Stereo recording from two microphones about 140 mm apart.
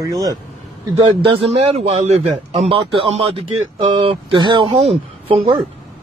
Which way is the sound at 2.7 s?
40° right (ahead or behind).